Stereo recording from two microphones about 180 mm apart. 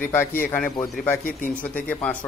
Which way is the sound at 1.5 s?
10° left (ahead or behind).